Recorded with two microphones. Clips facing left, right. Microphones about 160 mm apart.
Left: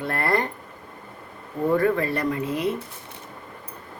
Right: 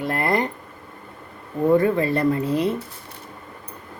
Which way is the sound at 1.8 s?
20° right (ahead or behind).